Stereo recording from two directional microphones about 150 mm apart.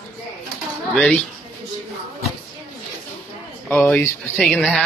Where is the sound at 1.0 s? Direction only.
10° left (ahead or behind).